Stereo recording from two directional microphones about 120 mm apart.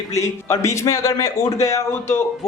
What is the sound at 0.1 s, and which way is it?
A man's voice, 25° left (ahead or behind).